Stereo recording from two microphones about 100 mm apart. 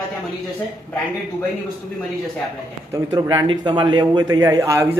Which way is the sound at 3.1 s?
45° right (ahead or behind).